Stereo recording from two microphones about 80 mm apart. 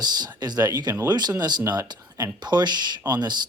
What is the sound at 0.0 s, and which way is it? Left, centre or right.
Speech, right.